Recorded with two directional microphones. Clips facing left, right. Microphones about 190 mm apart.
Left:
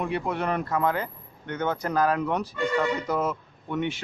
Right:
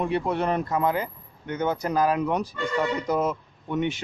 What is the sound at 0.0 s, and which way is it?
Speech, 30° right (ahead or behind).